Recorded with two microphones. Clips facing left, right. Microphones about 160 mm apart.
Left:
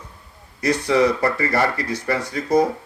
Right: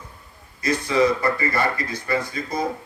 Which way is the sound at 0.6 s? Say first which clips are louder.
Left 2 dB; 70° left (ahead or behind).